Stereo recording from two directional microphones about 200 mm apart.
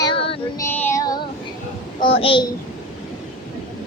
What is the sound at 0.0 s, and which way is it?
Child singing, 25° left (ahead or behind).